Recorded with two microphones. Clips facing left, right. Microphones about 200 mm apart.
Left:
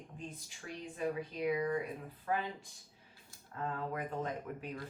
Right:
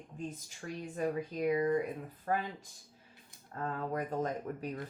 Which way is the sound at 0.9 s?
45° right (ahead or behind).